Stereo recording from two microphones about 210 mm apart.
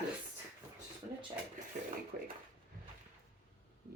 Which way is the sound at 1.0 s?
35° right (ahead or behind).